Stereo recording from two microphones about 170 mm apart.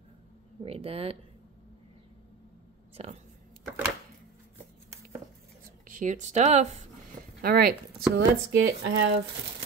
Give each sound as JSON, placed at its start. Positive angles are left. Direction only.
{"t": 0.7, "sound": "speech", "side_deg": -35}
{"t": 3.0, "sound": "speech", "side_deg": -40}
{"t": 5.9, "sound": "speech", "side_deg": -50}
{"t": 7.4, "sound": "speech", "side_deg": -65}